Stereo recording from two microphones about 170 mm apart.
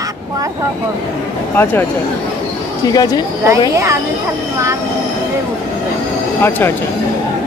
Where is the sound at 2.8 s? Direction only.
25° left (ahead or behind).